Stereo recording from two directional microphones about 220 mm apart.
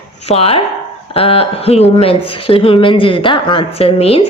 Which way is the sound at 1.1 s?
25° left (ahead or behind).